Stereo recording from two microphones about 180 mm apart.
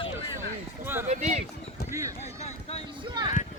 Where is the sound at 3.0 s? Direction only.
25° right (ahead or behind).